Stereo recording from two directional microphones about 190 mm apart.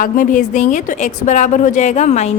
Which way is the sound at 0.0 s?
45° left (ahead or behind).